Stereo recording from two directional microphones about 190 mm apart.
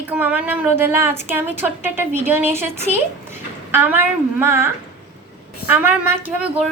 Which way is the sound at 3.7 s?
10° right (ahead or behind).